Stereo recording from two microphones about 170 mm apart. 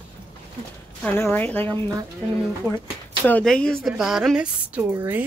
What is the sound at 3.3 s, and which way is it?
A woman's voice, 5° left (ahead or behind).